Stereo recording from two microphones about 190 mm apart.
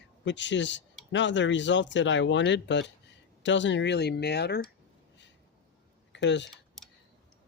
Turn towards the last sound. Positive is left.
turn(degrees=0)  # may be behind; listen again after turning